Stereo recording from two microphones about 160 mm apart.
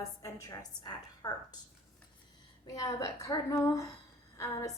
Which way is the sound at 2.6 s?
20° left (ahead or behind).